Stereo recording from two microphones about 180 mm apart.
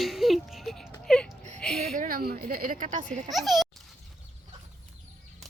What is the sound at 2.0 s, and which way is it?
Speech, 50° right (ahead or behind).